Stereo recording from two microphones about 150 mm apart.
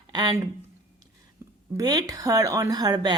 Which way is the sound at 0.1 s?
25° right (ahead or behind).